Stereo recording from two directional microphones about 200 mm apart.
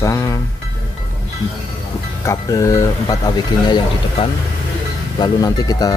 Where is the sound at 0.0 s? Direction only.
15° left (ahead or behind).